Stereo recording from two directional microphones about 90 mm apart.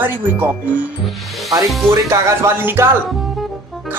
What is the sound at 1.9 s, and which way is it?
Speech, 30° right (ahead or behind).